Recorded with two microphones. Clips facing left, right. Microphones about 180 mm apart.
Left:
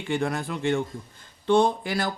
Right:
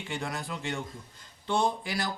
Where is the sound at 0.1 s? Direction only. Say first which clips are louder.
Left 9 dB; 55° left (ahead or behind).